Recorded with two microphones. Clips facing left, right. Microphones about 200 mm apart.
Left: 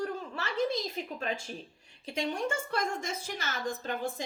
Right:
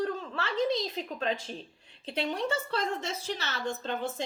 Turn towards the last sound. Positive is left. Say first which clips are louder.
# right 1 dB
turn(degrees=10)  # may be behind; listen again after turning